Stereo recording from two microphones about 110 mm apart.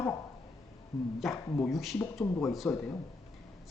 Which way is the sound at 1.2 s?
Centre (ahead or behind).